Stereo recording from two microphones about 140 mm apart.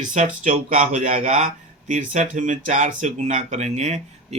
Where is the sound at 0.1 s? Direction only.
60° right (ahead or behind).